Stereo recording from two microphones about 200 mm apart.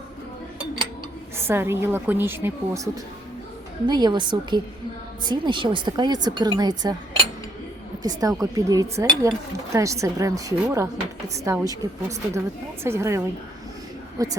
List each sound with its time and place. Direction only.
1.4 s a woman's voice: 10° right (ahead or behind)